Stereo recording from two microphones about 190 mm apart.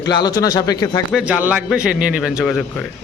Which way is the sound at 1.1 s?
5° right (ahead or behind).